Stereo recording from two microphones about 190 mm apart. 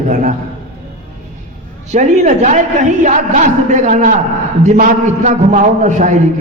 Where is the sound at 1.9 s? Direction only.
40° right (ahead or behind).